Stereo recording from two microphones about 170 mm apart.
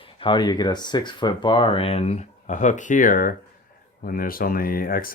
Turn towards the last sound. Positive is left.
turn(degrees=55)  # may be behind; listen again after turning